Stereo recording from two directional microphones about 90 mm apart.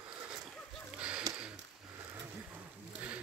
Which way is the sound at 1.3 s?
40° right (ahead or behind).